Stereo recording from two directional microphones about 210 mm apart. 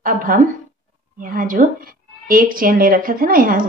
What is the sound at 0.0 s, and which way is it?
Speech, 40° right (ahead or behind).